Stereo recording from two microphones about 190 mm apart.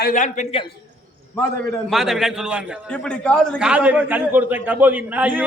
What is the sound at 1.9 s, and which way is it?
Speech, centre (ahead or behind).